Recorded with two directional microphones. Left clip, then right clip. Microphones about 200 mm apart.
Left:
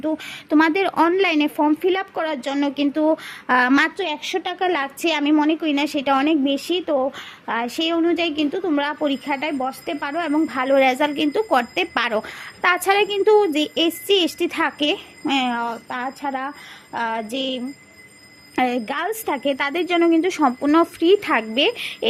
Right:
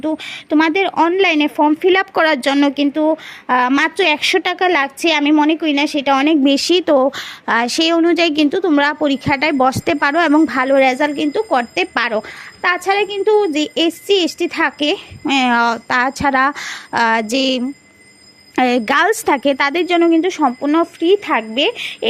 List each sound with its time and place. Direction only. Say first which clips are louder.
0.0 s a woman's voice: right 4 dB; 10° right (ahead or behind)
3.9 s a woman's voice: right 10 dB; 25° right (ahead or behind)
15.4 s a woman's voice: right 10 dB; 30° right (ahead or behind); by 21.9 s 10° right (ahead or behind)